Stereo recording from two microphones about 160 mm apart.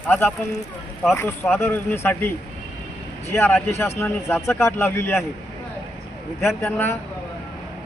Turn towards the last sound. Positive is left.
turn(degrees=15)  # may be behind; listen again after turning